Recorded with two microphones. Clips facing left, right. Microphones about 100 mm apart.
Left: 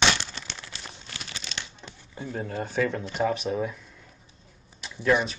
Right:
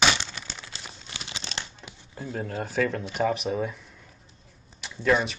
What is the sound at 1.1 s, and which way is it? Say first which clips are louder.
Crumpling: right 2 dB; 25° right (ahead or behind).